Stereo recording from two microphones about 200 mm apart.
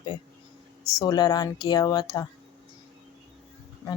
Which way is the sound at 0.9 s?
20° left (ahead or behind).